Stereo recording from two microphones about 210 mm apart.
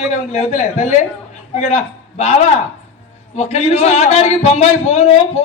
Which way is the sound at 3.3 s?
30° left (ahead or behind).